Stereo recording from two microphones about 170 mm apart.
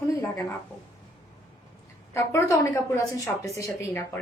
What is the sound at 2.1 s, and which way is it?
A woman's voice, 15° left (ahead or behind).